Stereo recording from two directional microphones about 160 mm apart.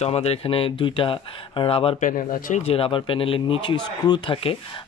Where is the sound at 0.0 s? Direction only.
40° left (ahead or behind).